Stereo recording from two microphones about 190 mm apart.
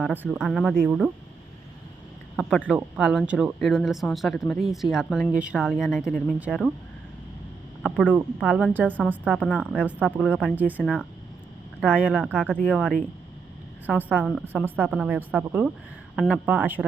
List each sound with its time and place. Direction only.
0.0 s speech: 5° right (ahead or behind)
2.3 s a sound: centre (ahead or behind)
2.7 s speech: 5° right (ahead or behind)
5.3 s speech: 5° right (ahead or behind)
7.8 s speech: centre (ahead or behind)
14.1 s speech: 10° right (ahead or behind)